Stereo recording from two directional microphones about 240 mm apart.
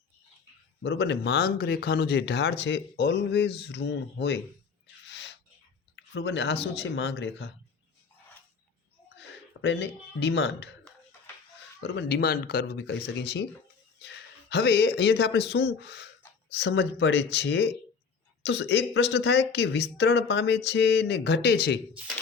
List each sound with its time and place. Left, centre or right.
0.8 s speech: left
5.0 s bird: left
6.0 s speech: left
9.6 s speech: left
11.8 s speech: left
14.5 s speech: left